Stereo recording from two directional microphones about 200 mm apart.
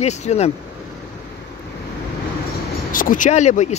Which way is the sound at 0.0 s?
35° left (ahead or behind).